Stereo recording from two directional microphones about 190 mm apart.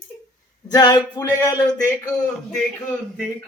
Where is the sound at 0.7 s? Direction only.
20° left (ahead or behind).